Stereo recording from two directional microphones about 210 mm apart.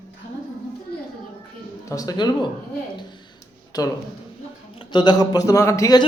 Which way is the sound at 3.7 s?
20° left (ahead or behind).